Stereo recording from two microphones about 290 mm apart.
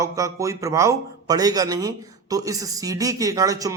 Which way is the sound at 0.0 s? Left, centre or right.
Centre.